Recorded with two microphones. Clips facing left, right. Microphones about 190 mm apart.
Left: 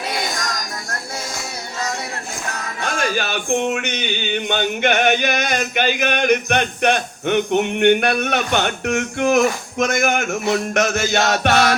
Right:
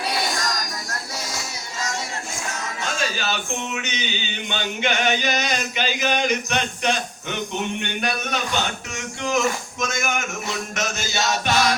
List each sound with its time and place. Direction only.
1.8 s speech: 60° left (ahead or behind)